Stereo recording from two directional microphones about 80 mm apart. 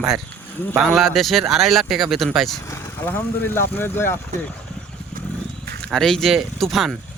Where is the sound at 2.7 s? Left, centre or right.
Left.